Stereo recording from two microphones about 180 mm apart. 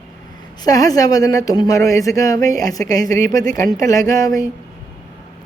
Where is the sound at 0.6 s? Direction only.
20° left (ahead or behind).